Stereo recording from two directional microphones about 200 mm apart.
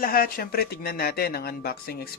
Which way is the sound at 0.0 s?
50° left (ahead or behind).